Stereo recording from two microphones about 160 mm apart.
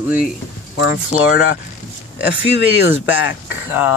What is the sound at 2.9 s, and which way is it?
Speech, 10° right (ahead or behind).